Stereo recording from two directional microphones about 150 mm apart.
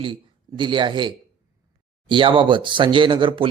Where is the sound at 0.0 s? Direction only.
35° right (ahead or behind).